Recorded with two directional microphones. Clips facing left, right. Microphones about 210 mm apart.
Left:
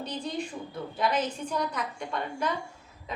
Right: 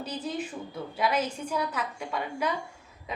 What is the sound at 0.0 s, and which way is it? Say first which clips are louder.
A woman's voice: even; 5° right (ahead or behind).